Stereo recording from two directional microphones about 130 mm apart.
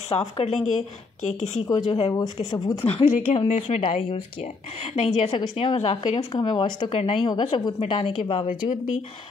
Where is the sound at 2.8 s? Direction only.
45° left (ahead or behind).